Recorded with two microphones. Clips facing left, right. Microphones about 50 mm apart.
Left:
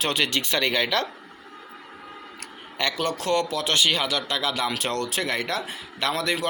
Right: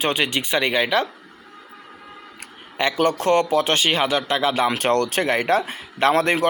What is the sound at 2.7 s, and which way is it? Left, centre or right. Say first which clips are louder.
Speech: right 6 dB; right.